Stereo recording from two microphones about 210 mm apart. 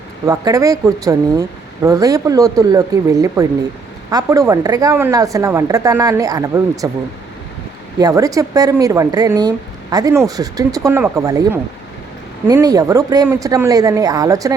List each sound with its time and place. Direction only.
0.3 s speech: 15° right (ahead or behind)
7.9 s speech: 15° right (ahead or behind)